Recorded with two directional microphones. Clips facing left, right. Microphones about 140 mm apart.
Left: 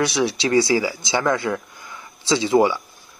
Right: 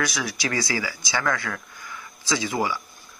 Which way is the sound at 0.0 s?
25° left (ahead or behind).